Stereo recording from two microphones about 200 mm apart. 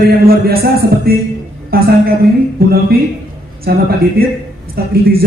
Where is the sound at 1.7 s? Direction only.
50° right (ahead or behind).